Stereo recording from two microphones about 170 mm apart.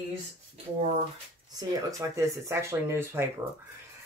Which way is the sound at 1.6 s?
20° right (ahead or behind).